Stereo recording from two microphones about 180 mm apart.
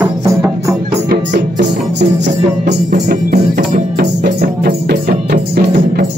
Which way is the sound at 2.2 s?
45° right (ahead or behind).